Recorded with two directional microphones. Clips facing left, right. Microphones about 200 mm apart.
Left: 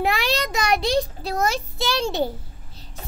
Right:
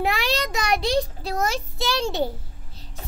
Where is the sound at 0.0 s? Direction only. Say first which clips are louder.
Left 1 dB; 60° left (ahead or behind).